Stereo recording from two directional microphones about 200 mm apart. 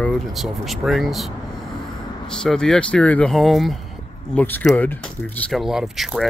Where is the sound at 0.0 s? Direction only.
Centre (ahead or behind).